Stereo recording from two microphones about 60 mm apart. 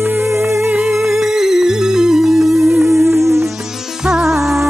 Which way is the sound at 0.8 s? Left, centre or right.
Centre.